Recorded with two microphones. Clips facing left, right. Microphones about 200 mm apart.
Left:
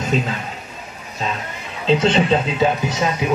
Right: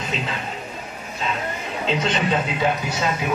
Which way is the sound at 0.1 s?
45° left (ahead or behind).